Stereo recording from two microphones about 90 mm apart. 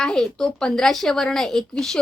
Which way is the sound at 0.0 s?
5° left (ahead or behind).